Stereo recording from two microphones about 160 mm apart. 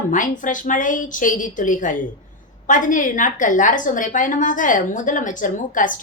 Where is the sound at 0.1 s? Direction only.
55° left (ahead or behind).